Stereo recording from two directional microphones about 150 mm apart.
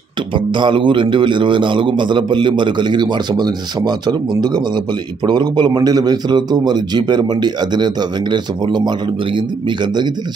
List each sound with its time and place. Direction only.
0.6 s a man's voice: 30° right (ahead or behind)
5.2 s a man's voice: 30° right (ahead or behind)